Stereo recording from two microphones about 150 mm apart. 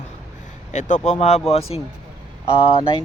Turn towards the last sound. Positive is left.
turn(degrees=35)  # may be behind; listen again after turning